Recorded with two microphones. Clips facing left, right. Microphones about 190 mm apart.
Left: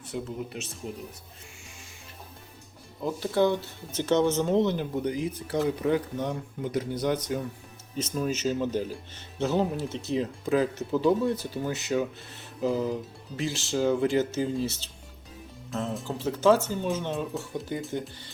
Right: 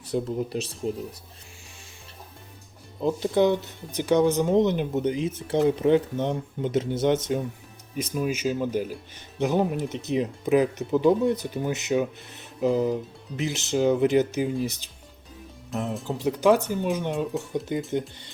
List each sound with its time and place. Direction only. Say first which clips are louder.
0.0 s speech: right 7 dB; 35° right (ahead or behind)
3.0 s speech: right 3 dB; 20° right (ahead or behind)
7.9 s speech: right 2 dB; 10° right (ahead or behind)
16.0 s speech: right 2 dB; 15° right (ahead or behind)